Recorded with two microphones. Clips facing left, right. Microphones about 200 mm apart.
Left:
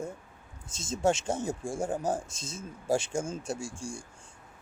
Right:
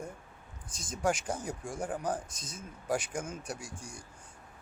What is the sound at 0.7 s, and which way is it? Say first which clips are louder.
Speech: left 4 dB; 25° left (ahead or behind).